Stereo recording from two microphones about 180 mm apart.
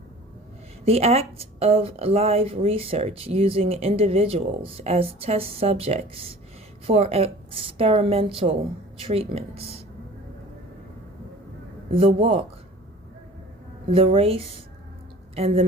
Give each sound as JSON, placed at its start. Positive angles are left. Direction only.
{"t": 0.9, "sound": "speech", "side_deg": -35}
{"t": 11.9, "sound": "speech", "side_deg": -30}
{"t": 13.9, "sound": "speech", "side_deg": -30}